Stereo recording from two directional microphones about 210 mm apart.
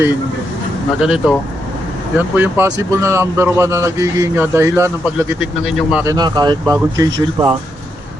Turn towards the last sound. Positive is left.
turn(degrees=-15)  # may be behind; listen again after turning